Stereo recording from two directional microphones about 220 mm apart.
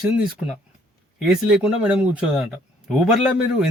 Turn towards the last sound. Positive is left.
turn(degrees=0)  # may be behind; listen again after turning